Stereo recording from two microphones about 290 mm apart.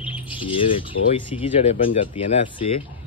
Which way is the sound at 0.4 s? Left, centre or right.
Centre.